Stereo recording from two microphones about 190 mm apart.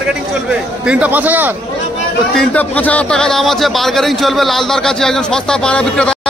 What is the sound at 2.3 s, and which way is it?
Speech, 10° left (ahead or behind).